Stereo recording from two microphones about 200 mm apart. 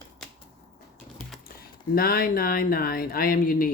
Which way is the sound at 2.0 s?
50° left (ahead or behind).